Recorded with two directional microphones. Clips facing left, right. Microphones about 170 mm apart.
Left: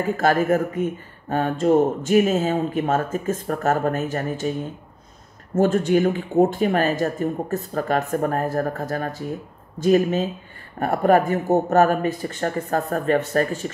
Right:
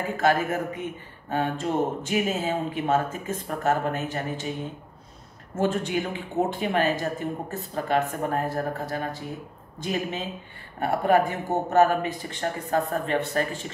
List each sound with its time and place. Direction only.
0.2 s speech: 45° left (ahead or behind)
5.6 s speech: 45° left (ahead or behind)